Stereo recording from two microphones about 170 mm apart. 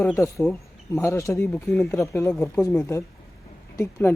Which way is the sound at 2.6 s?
15° left (ahead or behind).